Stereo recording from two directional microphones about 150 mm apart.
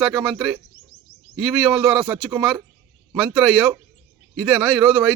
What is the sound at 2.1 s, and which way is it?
Speech, 10° right (ahead or behind).